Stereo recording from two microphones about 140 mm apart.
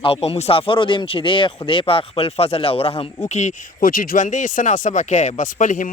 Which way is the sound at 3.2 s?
60° left (ahead or behind).